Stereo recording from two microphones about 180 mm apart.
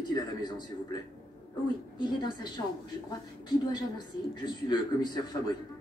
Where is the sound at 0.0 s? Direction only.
25° left (ahead or behind).